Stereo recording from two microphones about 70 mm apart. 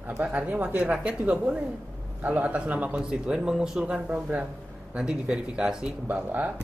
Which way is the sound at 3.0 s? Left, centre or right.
Centre.